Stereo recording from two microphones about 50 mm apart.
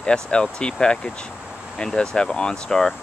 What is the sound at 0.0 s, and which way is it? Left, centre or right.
Speech, centre.